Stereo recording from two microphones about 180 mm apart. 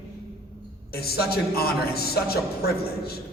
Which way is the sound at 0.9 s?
60° left (ahead or behind).